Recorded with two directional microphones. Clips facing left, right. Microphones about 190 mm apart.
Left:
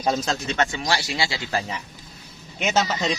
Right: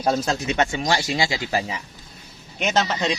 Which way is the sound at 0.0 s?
10° right (ahead or behind).